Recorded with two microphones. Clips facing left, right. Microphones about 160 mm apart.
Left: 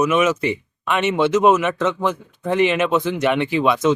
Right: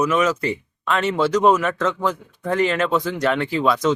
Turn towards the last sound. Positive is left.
turn(degrees=15)  # may be behind; listen again after turning